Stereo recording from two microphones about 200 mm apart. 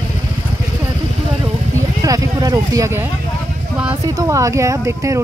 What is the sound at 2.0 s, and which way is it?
Speech, 20° right (ahead or behind).